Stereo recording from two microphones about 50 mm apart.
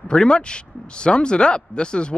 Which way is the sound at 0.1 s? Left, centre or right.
Centre.